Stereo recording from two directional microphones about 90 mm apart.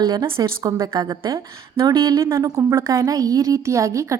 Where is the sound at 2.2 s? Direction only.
30° right (ahead or behind).